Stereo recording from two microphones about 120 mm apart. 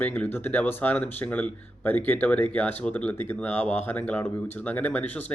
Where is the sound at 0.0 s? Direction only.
15° left (ahead or behind).